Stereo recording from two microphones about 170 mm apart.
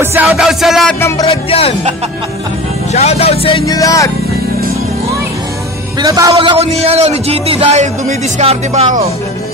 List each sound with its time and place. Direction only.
0.0 s music: 15° right (ahead or behind)
0.4 s music: centre (ahead or behind)
1.2 s speech: 35° left (ahead or behind)
2.9 s speech: 40° left (ahead or behind)
3.6 s speech: 20° left (ahead or behind)
5.9 s a man's voice: 20° right (ahead or behind)
6.3 s a man's voice: 35° right (ahead or behind)